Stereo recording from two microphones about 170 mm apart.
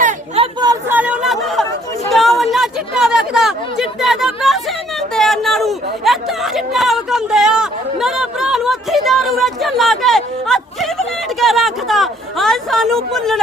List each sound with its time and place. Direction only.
0.3 s a sound: 25° right (ahead or behind)
0.9 s chatter: 10° right (ahead or behind)
2.0 s a woman's voice: centre (ahead or behind)
5.1 s chatter: centre (ahead or behind)